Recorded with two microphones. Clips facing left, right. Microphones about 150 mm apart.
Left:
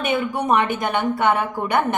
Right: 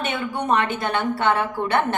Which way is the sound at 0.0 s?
10° left (ahead or behind).